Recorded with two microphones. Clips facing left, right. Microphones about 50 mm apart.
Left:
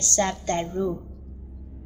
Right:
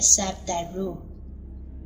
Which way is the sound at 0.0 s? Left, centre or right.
Left.